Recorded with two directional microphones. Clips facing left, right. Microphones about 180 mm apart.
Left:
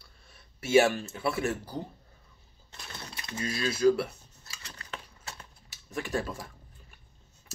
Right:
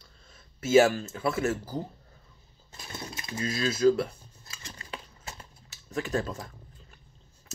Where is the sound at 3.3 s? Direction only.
25° right (ahead or behind).